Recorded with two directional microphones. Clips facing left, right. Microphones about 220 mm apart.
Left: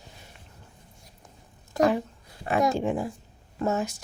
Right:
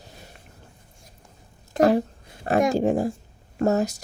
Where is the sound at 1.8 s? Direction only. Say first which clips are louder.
Right 4 dB; 40° right (ahead or behind).